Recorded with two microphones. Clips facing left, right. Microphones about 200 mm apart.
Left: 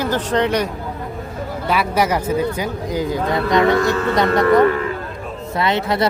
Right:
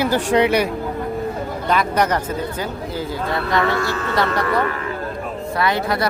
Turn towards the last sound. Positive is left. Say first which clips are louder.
# left 1 dB
turn(degrees=25)  # may be behind; listen again after turning